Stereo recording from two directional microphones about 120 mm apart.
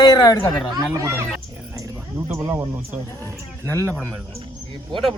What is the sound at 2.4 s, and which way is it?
Speech, 25° right (ahead or behind).